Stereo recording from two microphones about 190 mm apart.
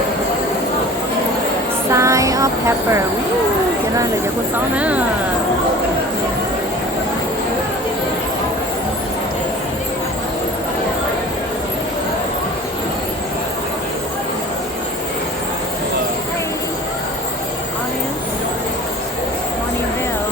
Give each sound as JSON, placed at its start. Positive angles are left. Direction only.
{"t": 1.9, "sound": "music", "side_deg": -15}
{"t": 4.8, "sound": "speech", "side_deg": -5}